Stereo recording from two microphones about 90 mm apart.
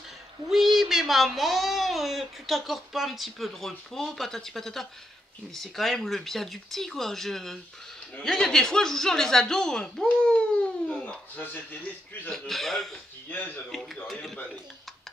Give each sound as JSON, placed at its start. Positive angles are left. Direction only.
{"t": 0.5, "sound": "speech", "side_deg": -5}
{"t": 12.3, "sound": "speech", "side_deg": 5}
{"t": 14.0, "sound": "speech", "side_deg": 5}